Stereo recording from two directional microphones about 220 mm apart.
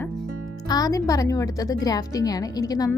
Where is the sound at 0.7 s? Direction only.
15° left (ahead or behind).